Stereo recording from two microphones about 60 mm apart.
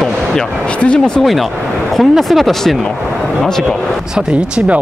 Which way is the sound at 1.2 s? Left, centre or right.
Centre.